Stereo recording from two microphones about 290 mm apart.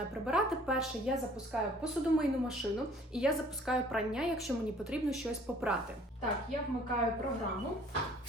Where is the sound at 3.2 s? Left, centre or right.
Centre.